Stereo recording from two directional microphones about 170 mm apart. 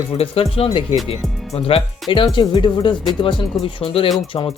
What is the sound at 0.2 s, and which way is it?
Speech, 35° left (ahead or behind).